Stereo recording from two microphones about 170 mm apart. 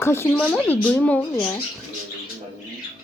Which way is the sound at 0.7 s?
10° left (ahead or behind).